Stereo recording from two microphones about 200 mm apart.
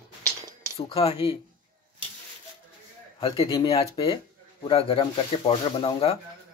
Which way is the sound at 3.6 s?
30° left (ahead or behind).